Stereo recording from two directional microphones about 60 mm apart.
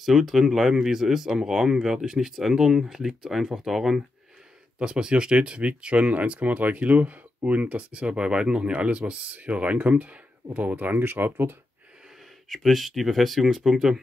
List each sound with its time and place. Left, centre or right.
0.0 s speech: centre; by 11.5 s right
12.4 s speech: centre